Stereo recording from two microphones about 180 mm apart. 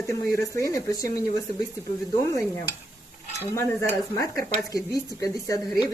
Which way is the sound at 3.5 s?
15° left (ahead or behind).